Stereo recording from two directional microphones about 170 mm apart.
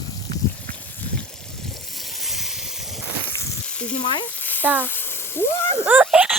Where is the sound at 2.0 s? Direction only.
Centre (ahead or behind).